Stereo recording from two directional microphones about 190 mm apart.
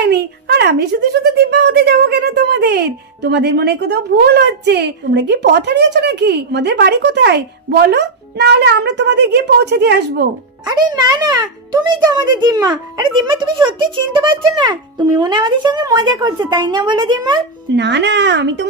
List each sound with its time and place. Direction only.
0.0 s speech: 60° right (ahead or behind)
10.7 s a child's voice: 20° right (ahead or behind)
14.1 s a child's voice: 25° right (ahead or behind)
17.7 s speech: 65° right (ahead or behind)